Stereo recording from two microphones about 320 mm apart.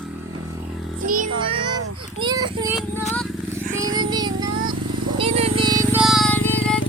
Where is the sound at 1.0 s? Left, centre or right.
Right.